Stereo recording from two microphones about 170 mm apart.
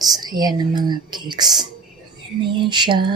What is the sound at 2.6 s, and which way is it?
Lullaby, 25° right (ahead or behind).